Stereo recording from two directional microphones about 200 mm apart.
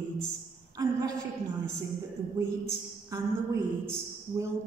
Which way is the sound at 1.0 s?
15° right (ahead or behind).